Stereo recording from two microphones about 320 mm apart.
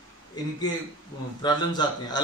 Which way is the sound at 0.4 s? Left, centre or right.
Centre.